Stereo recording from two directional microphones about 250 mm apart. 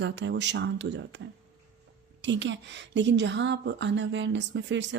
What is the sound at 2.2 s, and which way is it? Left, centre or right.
A woman's voice, right.